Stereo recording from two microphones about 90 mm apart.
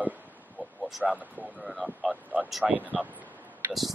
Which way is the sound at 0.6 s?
15° right (ahead or behind).